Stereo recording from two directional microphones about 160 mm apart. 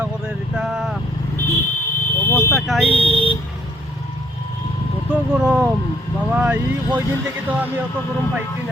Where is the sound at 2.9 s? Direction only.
35° left (ahead or behind).